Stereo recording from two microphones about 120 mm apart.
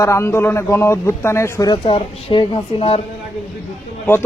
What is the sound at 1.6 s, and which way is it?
A woman's voice, 40° left (ahead or behind).